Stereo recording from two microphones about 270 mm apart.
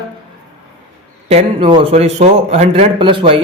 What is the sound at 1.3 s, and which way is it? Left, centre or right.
A man's voice, centre.